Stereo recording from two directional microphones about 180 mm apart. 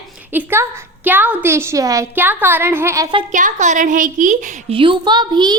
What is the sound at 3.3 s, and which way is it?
A woman's voice, 45° right (ahead or behind).